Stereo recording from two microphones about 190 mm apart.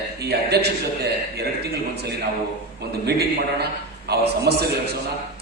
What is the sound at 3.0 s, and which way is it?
A man's voice, 60° right (ahead or behind).